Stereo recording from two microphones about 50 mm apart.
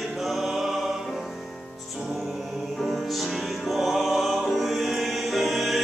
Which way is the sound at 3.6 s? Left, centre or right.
Centre.